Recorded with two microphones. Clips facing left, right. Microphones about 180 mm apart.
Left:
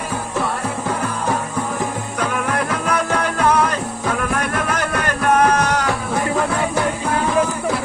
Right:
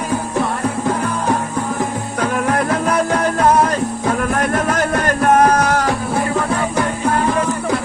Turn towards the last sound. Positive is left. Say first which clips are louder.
# right 2 dB
turn(degrees=-45)  # may be behind; listen again after turning